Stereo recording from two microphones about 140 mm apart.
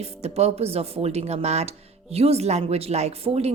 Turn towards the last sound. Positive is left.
turn(degrees=-45)  # may be behind; listen again after turning